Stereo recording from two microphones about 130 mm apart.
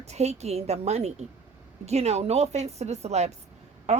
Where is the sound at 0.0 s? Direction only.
55° right (ahead or behind).